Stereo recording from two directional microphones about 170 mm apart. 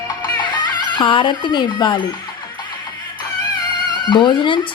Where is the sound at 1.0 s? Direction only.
30° left (ahead or behind).